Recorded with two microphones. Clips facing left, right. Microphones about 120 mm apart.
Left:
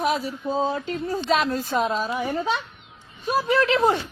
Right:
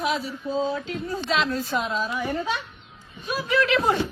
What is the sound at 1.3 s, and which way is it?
Speech, 45° left (ahead or behind).